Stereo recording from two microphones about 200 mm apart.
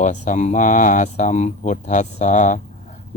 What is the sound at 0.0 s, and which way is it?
Speech, 40° left (ahead or behind).